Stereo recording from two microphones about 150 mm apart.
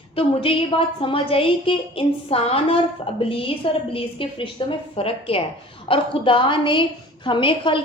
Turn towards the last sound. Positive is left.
turn(degrees=35)  # may be behind; listen again after turning